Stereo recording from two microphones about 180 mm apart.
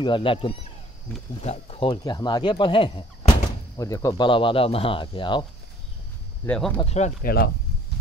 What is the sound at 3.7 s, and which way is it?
Speech, 20° left (ahead or behind).